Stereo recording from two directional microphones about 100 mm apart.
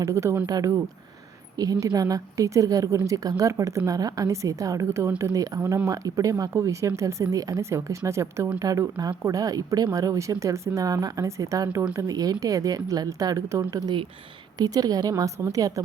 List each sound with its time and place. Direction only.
0.0 s speech: 30° right (ahead or behind)